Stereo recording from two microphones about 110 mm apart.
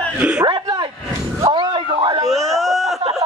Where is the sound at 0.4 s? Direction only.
40° right (ahead or behind).